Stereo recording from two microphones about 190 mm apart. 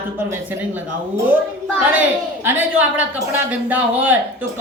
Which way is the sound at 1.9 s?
10° right (ahead or behind).